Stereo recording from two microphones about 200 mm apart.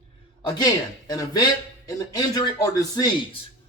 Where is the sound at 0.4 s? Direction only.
20° left (ahead or behind).